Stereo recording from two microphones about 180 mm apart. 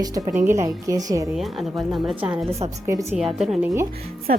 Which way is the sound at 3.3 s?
5° right (ahead or behind).